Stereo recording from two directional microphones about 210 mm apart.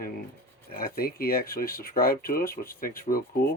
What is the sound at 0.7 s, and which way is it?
Speech, 45° left (ahead or behind).